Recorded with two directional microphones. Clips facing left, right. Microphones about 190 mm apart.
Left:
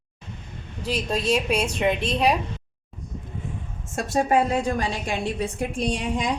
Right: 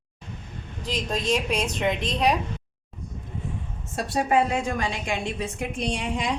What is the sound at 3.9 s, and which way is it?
A woman's voice, 45° left (ahead or behind).